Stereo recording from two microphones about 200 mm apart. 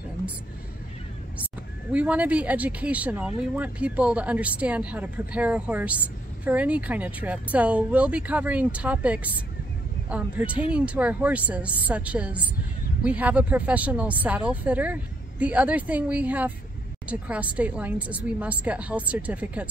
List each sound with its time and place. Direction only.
1.4 s speech: 5° right (ahead or behind)